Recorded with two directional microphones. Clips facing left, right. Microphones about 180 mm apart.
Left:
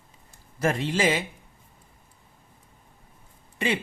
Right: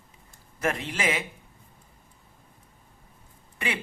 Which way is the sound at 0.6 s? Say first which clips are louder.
Left 5 dB; 30° left (ahead or behind).